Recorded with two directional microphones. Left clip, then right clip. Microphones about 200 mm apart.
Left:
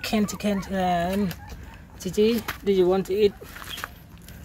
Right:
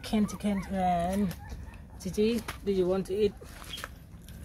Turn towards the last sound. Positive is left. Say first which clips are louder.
# left 6 dB
turn(degrees=35)  # may be behind; listen again after turning